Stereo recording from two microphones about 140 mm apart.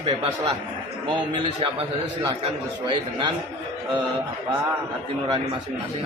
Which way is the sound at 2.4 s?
35° right (ahead or behind).